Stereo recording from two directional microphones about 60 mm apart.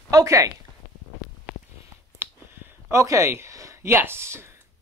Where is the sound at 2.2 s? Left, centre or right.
Right.